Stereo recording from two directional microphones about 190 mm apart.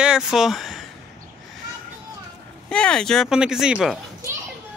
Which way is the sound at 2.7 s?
5° left (ahead or behind).